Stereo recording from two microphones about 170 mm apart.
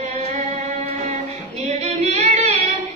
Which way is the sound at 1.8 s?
40° right (ahead or behind).